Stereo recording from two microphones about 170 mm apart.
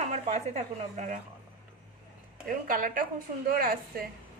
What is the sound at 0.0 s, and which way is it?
Speech, 40° right (ahead or behind).